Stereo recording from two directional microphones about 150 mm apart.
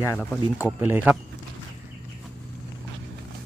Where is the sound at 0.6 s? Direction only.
10° right (ahead or behind).